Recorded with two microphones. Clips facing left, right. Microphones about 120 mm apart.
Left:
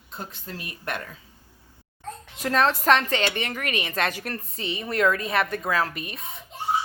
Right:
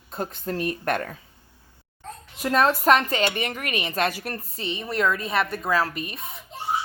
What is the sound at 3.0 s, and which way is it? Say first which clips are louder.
Speech: right 1 dB; 40° right (ahead or behind).